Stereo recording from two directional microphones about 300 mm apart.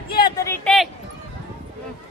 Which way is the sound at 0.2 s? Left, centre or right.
Centre.